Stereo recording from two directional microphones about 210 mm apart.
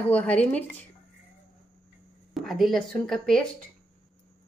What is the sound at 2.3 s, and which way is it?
Speech, centre (ahead or behind).